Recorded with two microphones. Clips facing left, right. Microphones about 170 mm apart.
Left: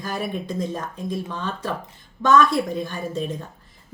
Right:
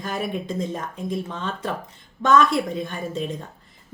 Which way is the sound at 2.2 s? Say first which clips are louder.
Left 1 dB; 25° right (ahead or behind).